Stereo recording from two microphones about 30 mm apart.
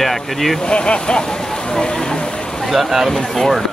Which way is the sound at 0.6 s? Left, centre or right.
Left.